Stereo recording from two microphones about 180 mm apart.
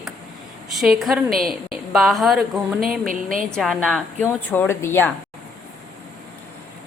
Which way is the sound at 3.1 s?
50° right (ahead or behind).